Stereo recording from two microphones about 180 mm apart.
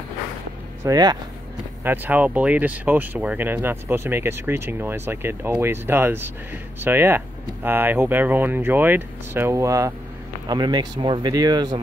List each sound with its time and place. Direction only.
0.8 s speech: 20° right (ahead or behind)
1.8 s speech: 10° right (ahead or behind)